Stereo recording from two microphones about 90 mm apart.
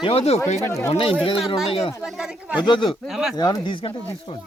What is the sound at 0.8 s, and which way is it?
Speech, 90° left.